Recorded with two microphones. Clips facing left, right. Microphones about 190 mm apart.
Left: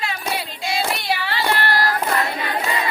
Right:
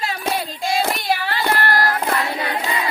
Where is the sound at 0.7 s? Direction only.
45° right (ahead or behind).